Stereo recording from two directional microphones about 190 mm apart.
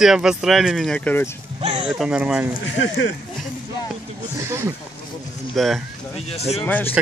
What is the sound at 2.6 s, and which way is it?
Speech, 75° left (ahead or behind).